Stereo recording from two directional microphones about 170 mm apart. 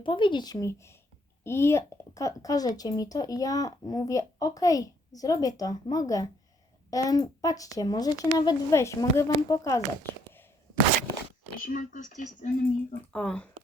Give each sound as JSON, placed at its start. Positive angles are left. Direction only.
{"t": 0.0, "sound": "speech", "side_deg": 30}
{"t": 11.6, "sound": "speech", "side_deg": 50}
{"t": 12.9, "sound": "speech", "side_deg": 5}